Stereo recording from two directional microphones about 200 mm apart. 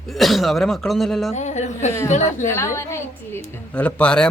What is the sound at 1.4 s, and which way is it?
A woman's voice, 35° left (ahead or behind).